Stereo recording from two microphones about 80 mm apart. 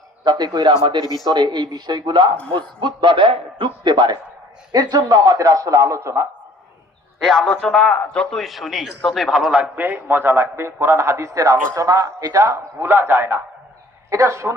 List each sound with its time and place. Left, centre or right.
0.3 s speech: right
1.3 s a man's voice: right
4.7 s a man's voice: right
7.2 s a man's voice: centre
7.4 s a man's voice: centre
9.5 s a man's voice: centre; by 14.5 s right